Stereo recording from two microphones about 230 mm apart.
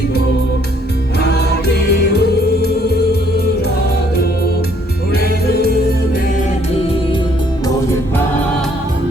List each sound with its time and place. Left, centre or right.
1.2 s music: left